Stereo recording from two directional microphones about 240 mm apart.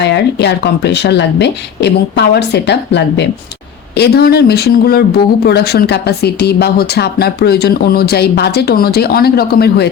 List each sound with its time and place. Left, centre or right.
0.0 s speech: left